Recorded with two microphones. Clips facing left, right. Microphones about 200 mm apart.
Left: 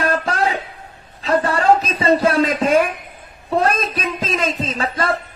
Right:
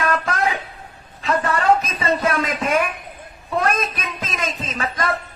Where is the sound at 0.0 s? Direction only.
30° left (ahead or behind).